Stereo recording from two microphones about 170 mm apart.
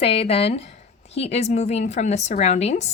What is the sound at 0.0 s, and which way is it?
A woman's voice, 35° left (ahead or behind).